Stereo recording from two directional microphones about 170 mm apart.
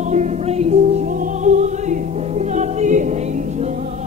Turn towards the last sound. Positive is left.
turn(degrees=-45)  # may be behind; listen again after turning